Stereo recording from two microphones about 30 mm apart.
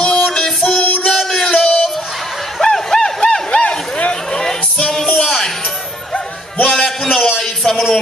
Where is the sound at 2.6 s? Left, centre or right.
Centre.